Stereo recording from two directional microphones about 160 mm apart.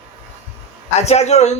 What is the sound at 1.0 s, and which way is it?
Speech, 45° left (ahead or behind).